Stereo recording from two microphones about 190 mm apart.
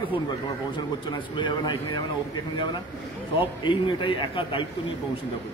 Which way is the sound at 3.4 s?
25° left (ahead or behind).